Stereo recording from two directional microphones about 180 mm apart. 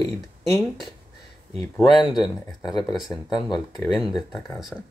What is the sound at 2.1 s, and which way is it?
Speech, 20° left (ahead or behind).